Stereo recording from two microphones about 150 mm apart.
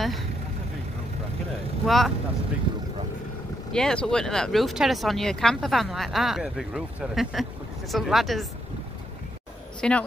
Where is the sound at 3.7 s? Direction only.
5° left (ahead or behind).